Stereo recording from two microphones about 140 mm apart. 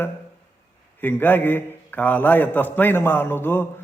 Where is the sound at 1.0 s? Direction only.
15° left (ahead or behind).